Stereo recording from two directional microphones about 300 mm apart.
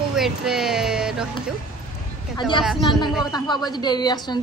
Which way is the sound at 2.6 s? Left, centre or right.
Centre.